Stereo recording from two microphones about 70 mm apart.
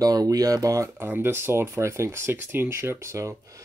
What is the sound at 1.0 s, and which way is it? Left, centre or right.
Speech, right.